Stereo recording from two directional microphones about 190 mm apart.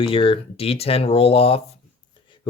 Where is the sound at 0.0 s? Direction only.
30° left (ahead or behind).